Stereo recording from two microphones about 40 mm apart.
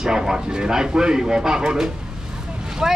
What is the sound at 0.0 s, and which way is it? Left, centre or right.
Speech, centre.